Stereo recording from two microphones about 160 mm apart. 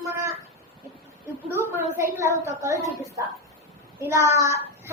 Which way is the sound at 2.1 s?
15° right (ahead or behind).